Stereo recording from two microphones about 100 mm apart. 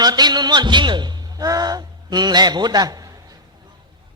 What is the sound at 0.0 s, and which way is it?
A man's voice, 45° right (ahead or behind).